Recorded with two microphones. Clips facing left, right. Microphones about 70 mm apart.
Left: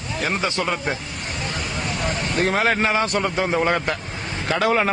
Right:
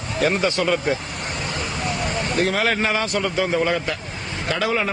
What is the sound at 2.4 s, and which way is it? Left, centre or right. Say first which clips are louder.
Speech: left 3 dB; left.